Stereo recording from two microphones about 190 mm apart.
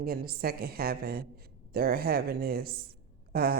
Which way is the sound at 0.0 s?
50° right (ahead or behind).